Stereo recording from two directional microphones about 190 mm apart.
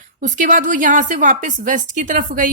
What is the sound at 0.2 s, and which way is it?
A woman's voice, 45° right (ahead or behind).